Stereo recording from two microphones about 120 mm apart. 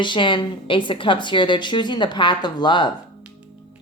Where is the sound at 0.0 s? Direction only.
40° left (ahead or behind).